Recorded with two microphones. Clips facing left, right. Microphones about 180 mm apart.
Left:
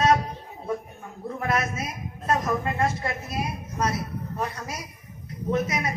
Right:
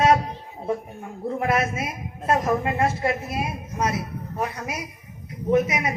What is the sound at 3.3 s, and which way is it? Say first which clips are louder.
Speech: right 2 dB; 20° right (ahead or behind).